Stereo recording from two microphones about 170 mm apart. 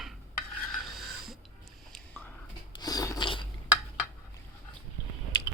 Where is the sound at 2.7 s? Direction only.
20° left (ahead or behind).